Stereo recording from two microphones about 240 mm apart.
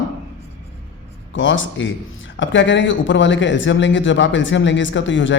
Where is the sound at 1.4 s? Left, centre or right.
Left.